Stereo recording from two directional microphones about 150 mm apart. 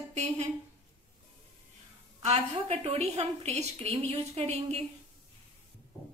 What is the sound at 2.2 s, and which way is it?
A woman's voice, 50° right (ahead or behind).